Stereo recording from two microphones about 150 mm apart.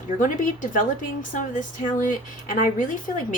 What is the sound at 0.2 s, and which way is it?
Speech, 60° left (ahead or behind).